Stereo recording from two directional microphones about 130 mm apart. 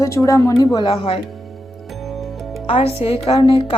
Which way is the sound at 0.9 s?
45° left (ahead or behind).